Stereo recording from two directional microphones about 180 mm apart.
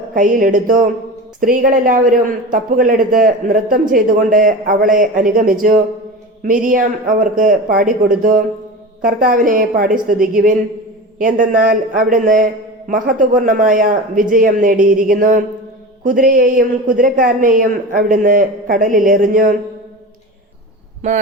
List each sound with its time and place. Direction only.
0.1 s a man's voice: 50° right (ahead or behind)
21.0 s speech: 40° right (ahead or behind)